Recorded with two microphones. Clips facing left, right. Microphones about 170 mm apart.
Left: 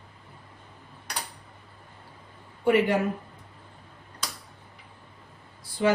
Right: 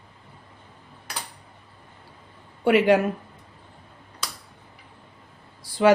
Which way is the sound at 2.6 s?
85° right.